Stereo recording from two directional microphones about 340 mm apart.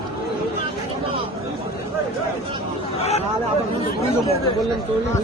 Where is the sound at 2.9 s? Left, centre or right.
Centre.